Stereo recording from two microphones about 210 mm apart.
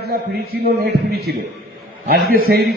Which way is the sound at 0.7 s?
50° right (ahead or behind).